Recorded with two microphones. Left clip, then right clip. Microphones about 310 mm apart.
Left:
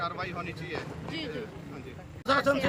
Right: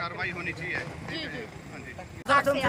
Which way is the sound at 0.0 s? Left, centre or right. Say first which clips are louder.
Right 2 dB; centre.